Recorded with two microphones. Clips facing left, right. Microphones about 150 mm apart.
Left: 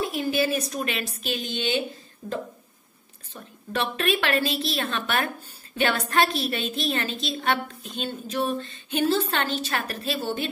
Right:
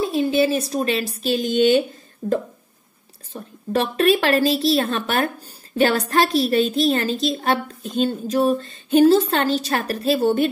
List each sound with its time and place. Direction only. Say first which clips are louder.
0.0 s a woman's voice: right 6 dB; 30° right (ahead or behind); by 10.5 s 45° right (ahead or behind)